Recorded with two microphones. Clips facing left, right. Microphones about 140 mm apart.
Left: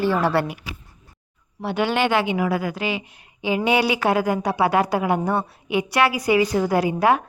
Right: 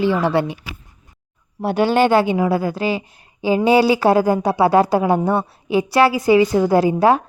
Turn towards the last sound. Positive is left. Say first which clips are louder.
# right 4 dB
turn(degrees=-30)  # may be behind; listen again after turning